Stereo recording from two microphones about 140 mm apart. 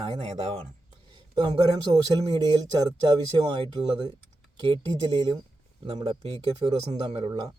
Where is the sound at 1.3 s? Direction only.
35° right (ahead or behind).